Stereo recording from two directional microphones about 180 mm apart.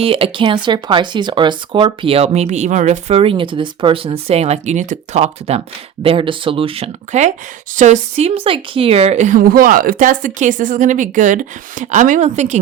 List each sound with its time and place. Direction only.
0.0 s a woman's voice: 30° right (ahead or behind)